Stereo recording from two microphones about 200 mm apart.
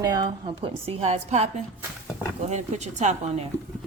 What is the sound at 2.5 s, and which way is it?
Speech, 35° right (ahead or behind).